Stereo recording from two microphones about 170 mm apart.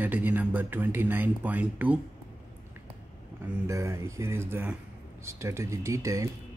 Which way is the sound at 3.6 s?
15° right (ahead or behind).